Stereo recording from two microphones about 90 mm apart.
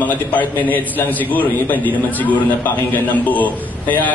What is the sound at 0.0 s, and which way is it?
A man's voice, 20° left (ahead or behind).